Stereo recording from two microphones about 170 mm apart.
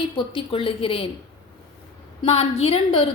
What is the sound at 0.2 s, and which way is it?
Speech, 30° left (ahead or behind).